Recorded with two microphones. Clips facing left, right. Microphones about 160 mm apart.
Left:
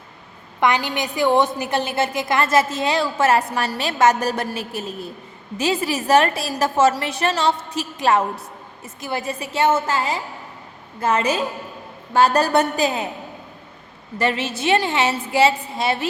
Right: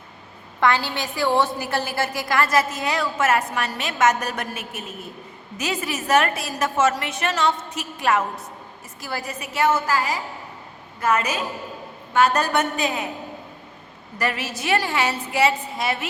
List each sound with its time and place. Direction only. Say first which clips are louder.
0.6 s a woman's voice: left 1 dB; 15° left (ahead or behind); by 13.1 s 35° left (ahead or behind)
14.2 s a woman's voice: left 4 dB; 25° left (ahead or behind)